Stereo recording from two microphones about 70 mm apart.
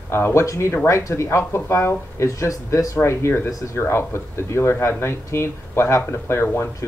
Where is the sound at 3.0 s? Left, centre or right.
Left.